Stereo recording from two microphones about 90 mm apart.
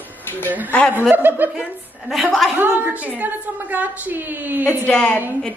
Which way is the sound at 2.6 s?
20° right (ahead or behind).